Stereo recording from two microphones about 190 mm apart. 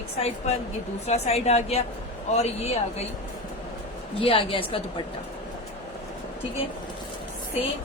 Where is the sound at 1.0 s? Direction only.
35° left (ahead or behind).